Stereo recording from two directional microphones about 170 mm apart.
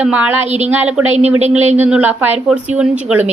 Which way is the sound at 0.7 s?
10° right (ahead or behind).